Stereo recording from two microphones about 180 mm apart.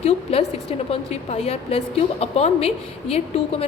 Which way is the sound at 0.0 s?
35° left (ahead or behind).